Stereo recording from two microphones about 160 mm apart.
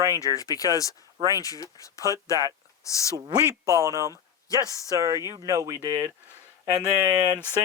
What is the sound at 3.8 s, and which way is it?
Speech, 20° right (ahead or behind).